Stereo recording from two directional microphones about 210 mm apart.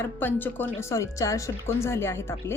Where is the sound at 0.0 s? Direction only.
10° left (ahead or behind).